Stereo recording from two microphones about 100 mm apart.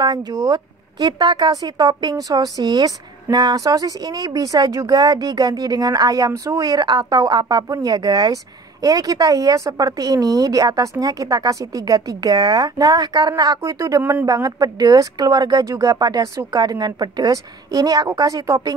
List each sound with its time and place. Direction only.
0.0 s a woman's voice: 45° right (ahead or behind)